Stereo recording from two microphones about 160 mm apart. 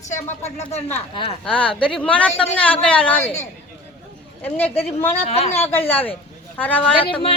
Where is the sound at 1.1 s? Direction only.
35° left (ahead or behind).